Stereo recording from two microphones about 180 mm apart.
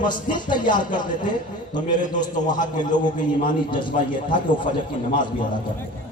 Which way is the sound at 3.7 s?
25° left (ahead or behind).